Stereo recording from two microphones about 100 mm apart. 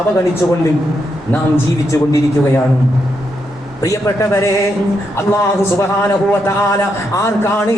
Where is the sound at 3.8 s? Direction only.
30° left (ahead or behind).